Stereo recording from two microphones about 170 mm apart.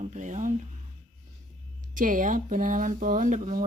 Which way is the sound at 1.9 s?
50° right (ahead or behind).